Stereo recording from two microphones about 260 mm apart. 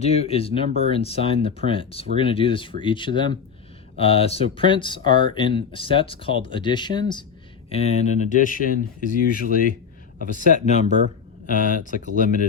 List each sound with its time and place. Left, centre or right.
0.0 s speech: left